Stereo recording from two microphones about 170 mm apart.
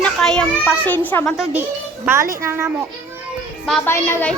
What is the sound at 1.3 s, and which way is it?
A woman's voice, 5° right (ahead or behind).